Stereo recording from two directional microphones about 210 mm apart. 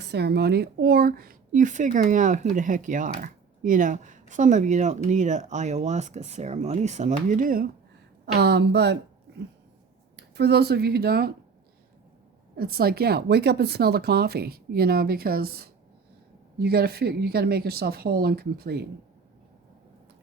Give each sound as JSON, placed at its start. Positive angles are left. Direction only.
{"t": 0.0, "sound": "speech", "side_deg": -50}
{"t": 8.4, "sound": "a woman's voice", "side_deg": -50}
{"t": 10.2, "sound": "a woman's voice", "side_deg": -50}
{"t": 12.5, "sound": "a woman's voice", "side_deg": -45}